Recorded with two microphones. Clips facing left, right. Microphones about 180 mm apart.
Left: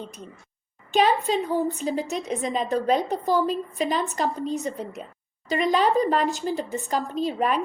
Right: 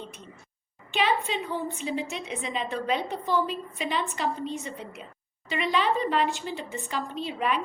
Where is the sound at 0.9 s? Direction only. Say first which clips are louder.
Left 6 dB; 40° left (ahead or behind).